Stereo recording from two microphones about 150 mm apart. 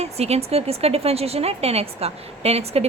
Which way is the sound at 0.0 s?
45° right (ahead or behind).